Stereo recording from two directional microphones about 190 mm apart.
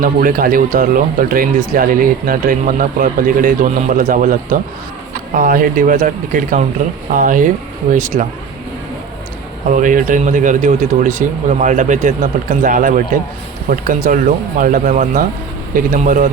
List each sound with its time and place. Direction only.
0.0 s speech: 45° right (ahead or behind)
9.6 s speech: 40° right (ahead or behind)